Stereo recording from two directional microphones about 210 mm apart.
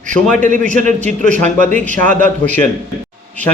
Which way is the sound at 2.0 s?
5° left (ahead or behind).